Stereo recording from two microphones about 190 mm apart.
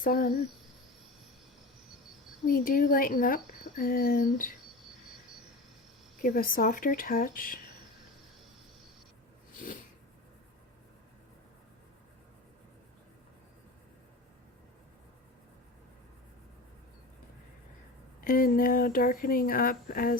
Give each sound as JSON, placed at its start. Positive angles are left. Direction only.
{"t": 0.0, "sound": "speech", "side_deg": 50}
{"t": 2.5, "sound": "speech", "side_deg": 50}
{"t": 6.2, "sound": "speech", "side_deg": 45}
{"t": 9.6, "sound": "snort", "side_deg": 45}
{"t": 18.2, "sound": "speech", "side_deg": 50}